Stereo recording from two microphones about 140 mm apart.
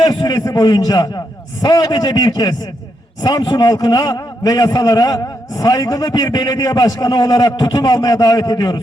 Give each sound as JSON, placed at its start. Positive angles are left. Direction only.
{"t": 0.0, "sound": "a man's voice", "side_deg": 30}